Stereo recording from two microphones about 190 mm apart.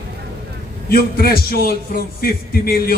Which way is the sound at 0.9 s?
55° left (ahead or behind).